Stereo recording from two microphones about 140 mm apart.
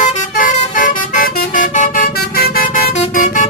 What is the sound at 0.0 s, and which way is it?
Vehicle, 70° left (ahead or behind).